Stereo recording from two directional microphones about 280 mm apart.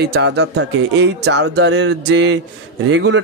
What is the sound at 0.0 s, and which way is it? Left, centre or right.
Speech, right.